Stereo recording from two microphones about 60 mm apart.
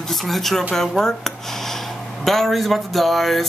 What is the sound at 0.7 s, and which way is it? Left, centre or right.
Speech, centre.